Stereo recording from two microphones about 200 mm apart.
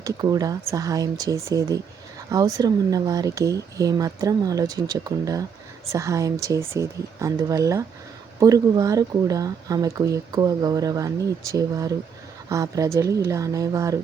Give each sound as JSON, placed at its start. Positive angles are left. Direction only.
{"t": 0.0, "sound": "speech", "side_deg": -20}